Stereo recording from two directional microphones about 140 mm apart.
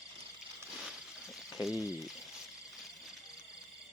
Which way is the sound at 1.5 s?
Centre (ahead or behind).